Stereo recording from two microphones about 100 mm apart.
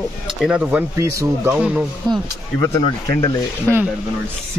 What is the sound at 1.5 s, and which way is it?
Speech, 15° right (ahead or behind).